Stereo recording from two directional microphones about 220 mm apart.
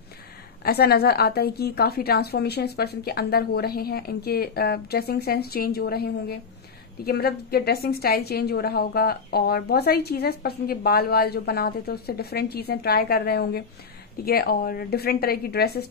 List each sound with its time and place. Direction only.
0.7 s a woman's voice: 45° left (ahead or behind)